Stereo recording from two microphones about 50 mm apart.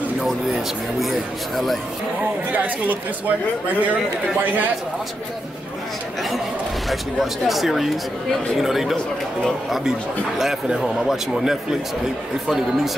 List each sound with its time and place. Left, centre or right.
2.5 s speech: right
6.9 s speech: centre
10.4 s speech: centre